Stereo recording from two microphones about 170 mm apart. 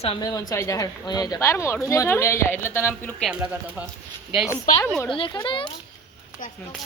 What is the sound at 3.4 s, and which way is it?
Speech, 10° right (ahead or behind).